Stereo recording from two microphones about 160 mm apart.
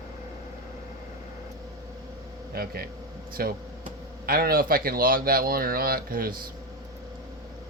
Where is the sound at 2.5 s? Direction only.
70° right (ahead or behind).